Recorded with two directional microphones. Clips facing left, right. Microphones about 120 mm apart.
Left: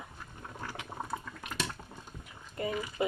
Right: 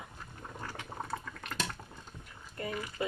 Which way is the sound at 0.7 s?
15° left (ahead or behind).